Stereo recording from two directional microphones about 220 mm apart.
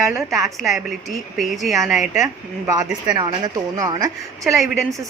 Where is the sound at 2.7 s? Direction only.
20° right (ahead or behind).